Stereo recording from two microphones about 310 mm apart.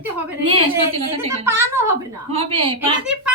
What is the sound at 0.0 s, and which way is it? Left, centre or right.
A woman's voice, centre.